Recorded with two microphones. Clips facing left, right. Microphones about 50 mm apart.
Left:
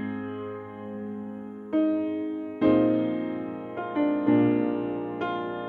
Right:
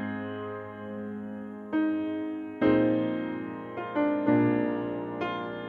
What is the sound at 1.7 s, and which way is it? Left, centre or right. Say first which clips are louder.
Music: left 3 dB; right.